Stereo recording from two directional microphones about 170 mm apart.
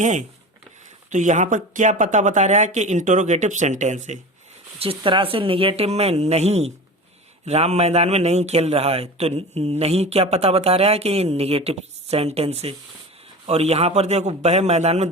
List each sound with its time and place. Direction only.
0.0 s speech: 45° right (ahead or behind)
4.8 s a man's voice: 30° right (ahead or behind)